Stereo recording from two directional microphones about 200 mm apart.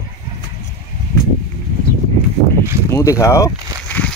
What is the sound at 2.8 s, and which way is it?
Speech, 15° left (ahead or behind).